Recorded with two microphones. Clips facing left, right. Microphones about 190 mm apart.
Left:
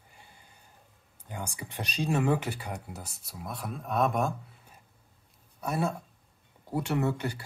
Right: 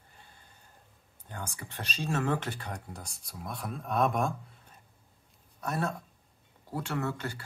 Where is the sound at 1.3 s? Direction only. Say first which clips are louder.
Left 3 dB; 15° left (ahead or behind).